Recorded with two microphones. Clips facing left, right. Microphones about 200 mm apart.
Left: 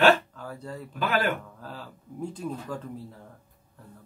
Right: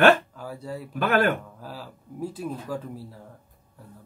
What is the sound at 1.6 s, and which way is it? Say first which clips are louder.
Speech: right 2 dB; 5° right (ahead or behind).